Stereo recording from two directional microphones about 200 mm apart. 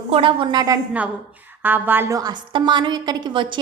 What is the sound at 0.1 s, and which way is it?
A woman's voice, 25° right (ahead or behind).